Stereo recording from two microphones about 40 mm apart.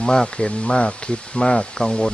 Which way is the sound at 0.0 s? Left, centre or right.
Centre.